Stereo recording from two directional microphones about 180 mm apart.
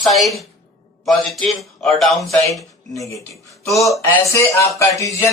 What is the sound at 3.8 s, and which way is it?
Speech, centre (ahead or behind).